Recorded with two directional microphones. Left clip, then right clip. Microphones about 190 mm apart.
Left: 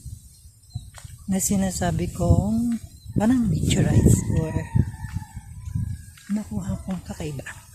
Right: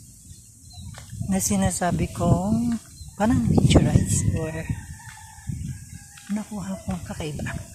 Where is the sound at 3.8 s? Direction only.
30° left (ahead or behind).